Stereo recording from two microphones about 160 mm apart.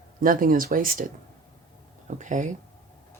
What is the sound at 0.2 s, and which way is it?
Speech, 60° right (ahead or behind).